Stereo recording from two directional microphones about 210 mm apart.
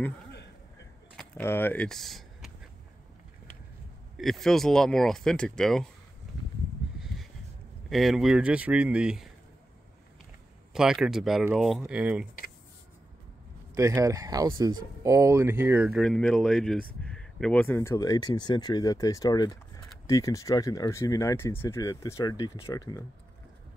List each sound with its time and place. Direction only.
1.1 s a sound: 10° left (ahead or behind)
4.2 s speech: centre (ahead or behind)
7.9 s speech: centre (ahead or behind)
10.7 s speech: centre (ahead or behind)
13.7 s speech: 15° right (ahead or behind); by 23.0 s 15° left (ahead or behind)